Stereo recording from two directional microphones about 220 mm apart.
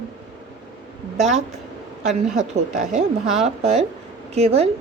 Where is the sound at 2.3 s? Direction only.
35° right (ahead or behind).